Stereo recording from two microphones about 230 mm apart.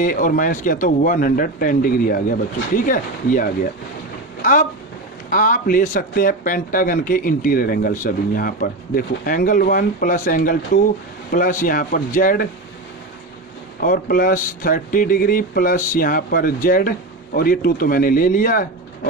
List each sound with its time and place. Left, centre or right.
0.0 s speech: left
13.7 s speech: left